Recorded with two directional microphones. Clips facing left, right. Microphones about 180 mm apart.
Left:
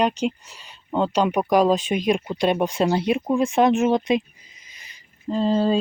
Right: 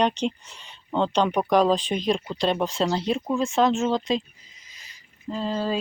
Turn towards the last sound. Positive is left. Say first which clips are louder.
# left 7 dB
turn(degrees=25)  # may be behind; listen again after turning